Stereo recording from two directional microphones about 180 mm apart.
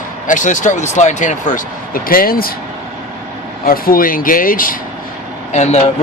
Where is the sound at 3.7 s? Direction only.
55° left (ahead or behind).